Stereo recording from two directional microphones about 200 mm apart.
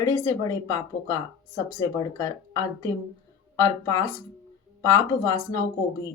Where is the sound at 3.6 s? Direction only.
15° left (ahead or behind).